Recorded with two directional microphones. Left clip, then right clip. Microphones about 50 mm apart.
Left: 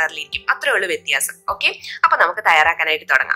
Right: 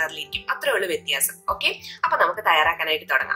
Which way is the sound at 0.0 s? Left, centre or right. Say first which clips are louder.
Left 6 dB; left.